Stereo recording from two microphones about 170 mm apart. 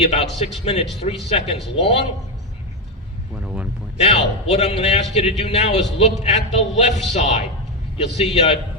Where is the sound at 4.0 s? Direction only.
40° left (ahead or behind).